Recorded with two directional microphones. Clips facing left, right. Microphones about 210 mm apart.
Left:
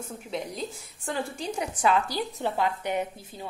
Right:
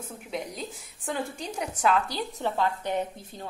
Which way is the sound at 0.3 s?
Centre (ahead or behind).